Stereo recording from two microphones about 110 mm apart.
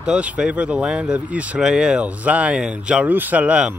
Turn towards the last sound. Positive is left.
turn(degrees=-10)  # may be behind; listen again after turning